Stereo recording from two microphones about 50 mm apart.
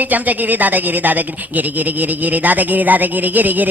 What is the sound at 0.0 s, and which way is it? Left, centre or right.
Speech, right.